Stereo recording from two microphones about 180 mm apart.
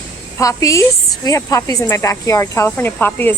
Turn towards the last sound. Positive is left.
turn(degrees=10)  # may be behind; listen again after turning